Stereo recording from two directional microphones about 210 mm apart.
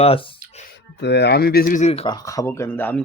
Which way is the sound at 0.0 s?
25° left (ahead or behind).